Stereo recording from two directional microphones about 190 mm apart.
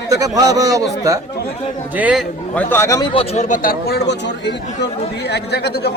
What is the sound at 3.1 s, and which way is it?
Speech, 35° left (ahead or behind).